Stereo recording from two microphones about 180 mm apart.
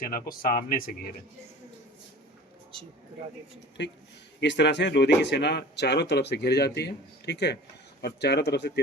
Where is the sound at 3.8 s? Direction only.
75° left (ahead or behind).